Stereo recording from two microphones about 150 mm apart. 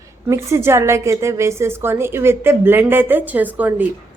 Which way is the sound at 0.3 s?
20° right (ahead or behind).